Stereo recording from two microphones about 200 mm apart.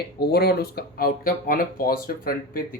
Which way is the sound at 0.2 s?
50° left (ahead or behind).